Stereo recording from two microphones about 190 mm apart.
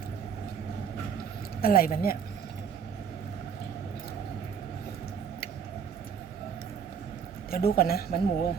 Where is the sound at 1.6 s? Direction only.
50° left (ahead or behind).